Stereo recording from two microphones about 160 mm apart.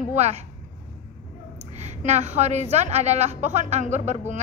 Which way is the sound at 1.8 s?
45° right (ahead or behind).